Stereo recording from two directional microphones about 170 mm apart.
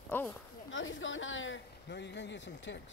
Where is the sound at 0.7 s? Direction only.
90° left.